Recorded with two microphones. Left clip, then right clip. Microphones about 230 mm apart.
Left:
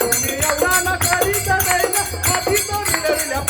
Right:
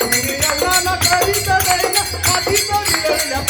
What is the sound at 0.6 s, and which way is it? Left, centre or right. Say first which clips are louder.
Music: right 2 dB; centre.